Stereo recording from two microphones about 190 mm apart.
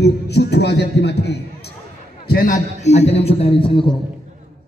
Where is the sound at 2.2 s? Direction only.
50° left (ahead or behind); by 3.9 s 25° left (ahead or behind).